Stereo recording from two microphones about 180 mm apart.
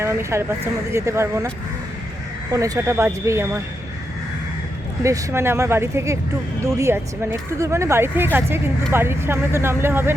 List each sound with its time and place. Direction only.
0.0 s speech: 15° right (ahead or behind)
2.5 s speech: 20° right (ahead or behind)
5.0 s speech: 15° right (ahead or behind)